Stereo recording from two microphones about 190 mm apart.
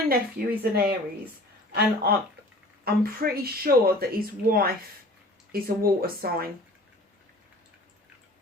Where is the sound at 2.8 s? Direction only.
50° right (ahead or behind).